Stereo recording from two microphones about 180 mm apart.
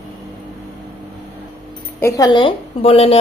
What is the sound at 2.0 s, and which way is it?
A woman's voice, 15° left (ahead or behind).